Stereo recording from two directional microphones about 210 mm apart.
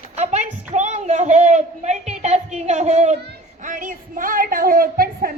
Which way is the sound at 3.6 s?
40° right (ahead or behind).